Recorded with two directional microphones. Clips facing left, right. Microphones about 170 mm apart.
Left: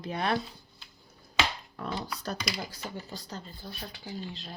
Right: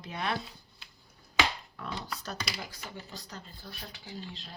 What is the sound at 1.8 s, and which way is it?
Speech, 40° left (ahead or behind).